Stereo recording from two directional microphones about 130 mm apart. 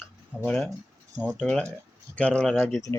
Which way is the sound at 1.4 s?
10° left (ahead or behind).